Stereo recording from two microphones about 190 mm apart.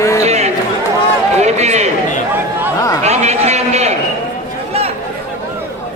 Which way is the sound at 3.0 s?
35° right (ahead or behind).